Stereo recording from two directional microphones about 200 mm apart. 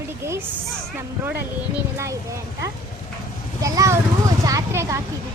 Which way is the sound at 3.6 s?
15° right (ahead or behind).